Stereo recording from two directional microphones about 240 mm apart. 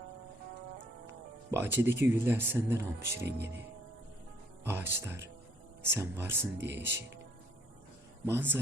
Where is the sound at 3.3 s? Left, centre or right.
Right.